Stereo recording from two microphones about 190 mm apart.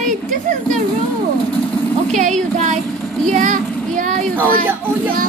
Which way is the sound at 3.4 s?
45° right (ahead or behind).